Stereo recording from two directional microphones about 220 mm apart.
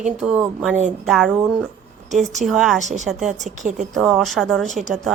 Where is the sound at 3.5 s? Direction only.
35° right (ahead or behind).